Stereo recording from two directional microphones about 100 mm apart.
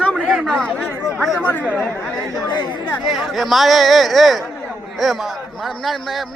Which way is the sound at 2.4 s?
45° left (ahead or behind).